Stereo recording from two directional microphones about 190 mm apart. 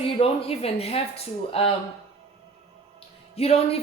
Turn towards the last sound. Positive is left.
turn(degrees=35)  # may be behind; listen again after turning